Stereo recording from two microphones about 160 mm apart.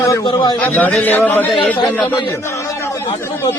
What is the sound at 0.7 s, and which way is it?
A man's voice, 10° left (ahead or behind).